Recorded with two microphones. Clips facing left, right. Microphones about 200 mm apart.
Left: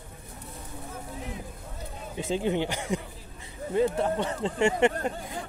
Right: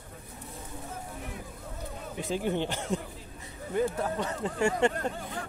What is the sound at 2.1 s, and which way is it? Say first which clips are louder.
Speech: left 3 dB; 25° left (ahead or behind).